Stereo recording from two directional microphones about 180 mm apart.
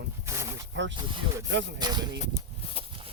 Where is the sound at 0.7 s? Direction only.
90° right.